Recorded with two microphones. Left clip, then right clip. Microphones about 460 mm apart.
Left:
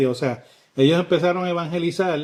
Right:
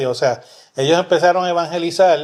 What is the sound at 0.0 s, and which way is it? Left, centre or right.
Speech, right.